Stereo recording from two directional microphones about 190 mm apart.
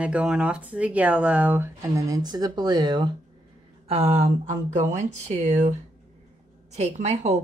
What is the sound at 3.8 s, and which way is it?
Speech, 35° right (ahead or behind).